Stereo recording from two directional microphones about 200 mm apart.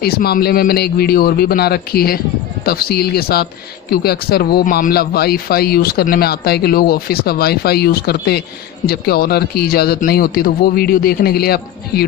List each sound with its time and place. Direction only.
0.0 s a man's voice: 50° left (ahead or behind)